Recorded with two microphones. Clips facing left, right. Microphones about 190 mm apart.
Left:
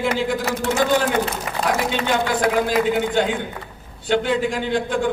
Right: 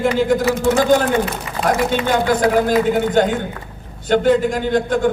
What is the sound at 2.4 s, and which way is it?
A man's voice, 45° right (ahead or behind).